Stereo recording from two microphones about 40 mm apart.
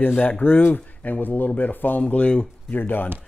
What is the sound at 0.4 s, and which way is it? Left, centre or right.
Speech, left.